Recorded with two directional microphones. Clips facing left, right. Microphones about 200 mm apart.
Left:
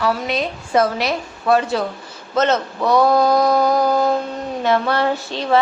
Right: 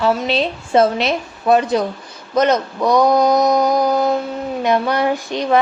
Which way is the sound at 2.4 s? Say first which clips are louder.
Right 2 dB; 15° right (ahead or behind).